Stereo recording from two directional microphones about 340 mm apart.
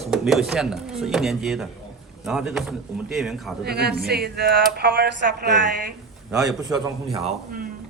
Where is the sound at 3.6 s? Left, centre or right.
Right.